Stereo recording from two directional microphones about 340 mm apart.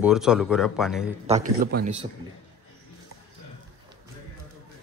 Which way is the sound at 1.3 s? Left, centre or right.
Right.